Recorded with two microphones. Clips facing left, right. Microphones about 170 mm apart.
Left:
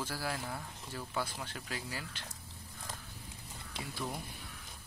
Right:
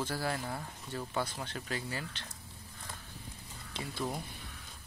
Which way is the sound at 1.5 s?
5° left (ahead or behind).